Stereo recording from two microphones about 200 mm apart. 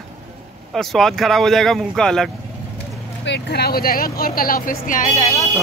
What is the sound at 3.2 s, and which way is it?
Speech, 60° left (ahead or behind).